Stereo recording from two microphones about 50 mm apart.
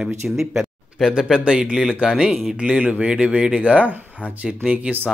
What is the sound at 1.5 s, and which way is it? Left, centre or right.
Speech, centre.